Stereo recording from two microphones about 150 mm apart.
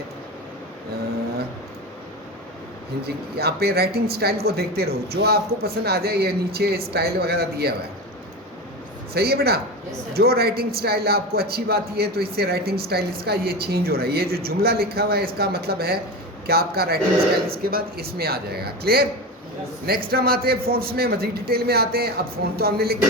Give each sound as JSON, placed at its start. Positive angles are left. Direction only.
{"t": 3.3, "sound": "speech", "side_deg": -90}
{"t": 9.1, "sound": "speech", "side_deg": -90}
{"t": 20.1, "sound": "speech", "side_deg": -90}